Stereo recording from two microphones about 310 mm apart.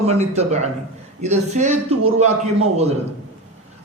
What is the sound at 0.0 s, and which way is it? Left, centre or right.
A man's voice, right.